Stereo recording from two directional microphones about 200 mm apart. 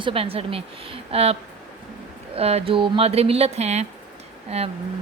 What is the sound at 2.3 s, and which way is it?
Speech, 30° right (ahead or behind).